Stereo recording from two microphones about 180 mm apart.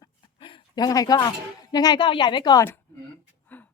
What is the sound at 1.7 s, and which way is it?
Speech, 20° left (ahead or behind).